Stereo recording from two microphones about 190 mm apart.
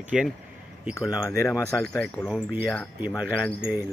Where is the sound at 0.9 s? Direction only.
20° left (ahead or behind).